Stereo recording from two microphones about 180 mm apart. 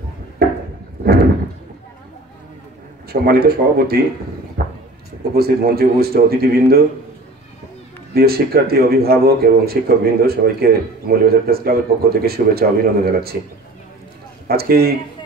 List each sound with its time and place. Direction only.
3.1 s a man's voice: 60° right (ahead or behind)
4.6 s a sound: 55° right (ahead or behind)
5.3 s a man's voice: 60° right (ahead or behind)
8.1 s a man's voice: 55° right (ahead or behind)
14.5 s a man's voice: 60° right (ahead or behind)